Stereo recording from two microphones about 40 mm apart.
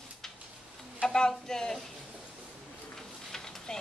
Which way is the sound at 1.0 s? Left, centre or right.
Centre.